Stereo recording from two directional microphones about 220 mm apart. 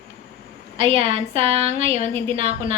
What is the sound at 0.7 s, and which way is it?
A woman's voice, 25° right (ahead or behind).